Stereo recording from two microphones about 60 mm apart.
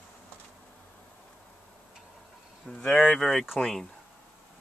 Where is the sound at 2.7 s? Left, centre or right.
Centre.